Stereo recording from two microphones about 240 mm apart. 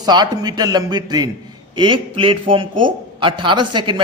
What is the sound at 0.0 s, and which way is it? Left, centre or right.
A man's voice, centre.